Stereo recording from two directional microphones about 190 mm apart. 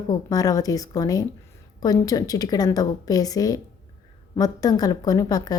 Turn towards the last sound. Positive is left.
turn(degrees=20)  # may be behind; listen again after turning